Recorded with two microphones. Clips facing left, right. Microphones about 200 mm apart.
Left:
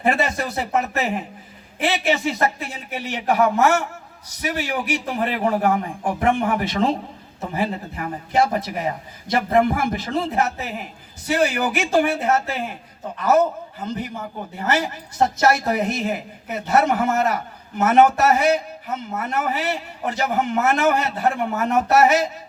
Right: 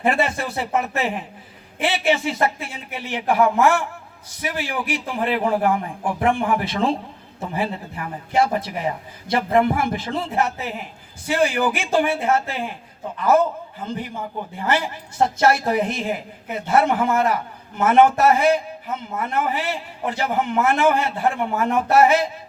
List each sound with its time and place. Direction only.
0.0 s a man's voice: 40° left (ahead or behind)